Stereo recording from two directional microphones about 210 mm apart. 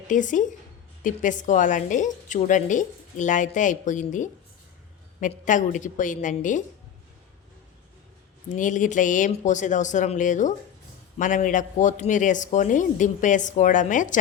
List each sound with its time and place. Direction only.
0.1 s a woman's voice: 35° left (ahead or behind)
8.4 s a woman's voice: 35° left (ahead or behind)